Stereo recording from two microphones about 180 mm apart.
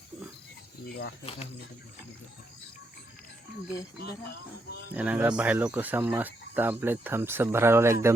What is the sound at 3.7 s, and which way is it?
Speech, 65° left (ahead or behind).